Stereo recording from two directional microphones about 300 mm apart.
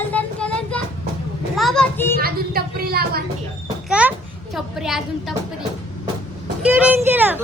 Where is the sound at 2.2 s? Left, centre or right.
Right.